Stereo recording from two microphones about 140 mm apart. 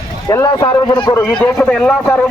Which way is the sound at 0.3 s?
30° left (ahead or behind).